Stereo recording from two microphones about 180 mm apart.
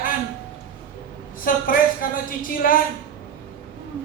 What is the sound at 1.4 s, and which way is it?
A woman's voice, 50° left (ahead or behind).